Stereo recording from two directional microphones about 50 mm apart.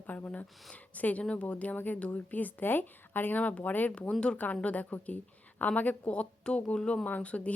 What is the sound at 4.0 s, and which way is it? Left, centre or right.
Speech, left.